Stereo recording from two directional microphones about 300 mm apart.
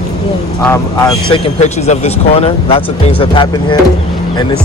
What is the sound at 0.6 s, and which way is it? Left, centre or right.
Speech, centre.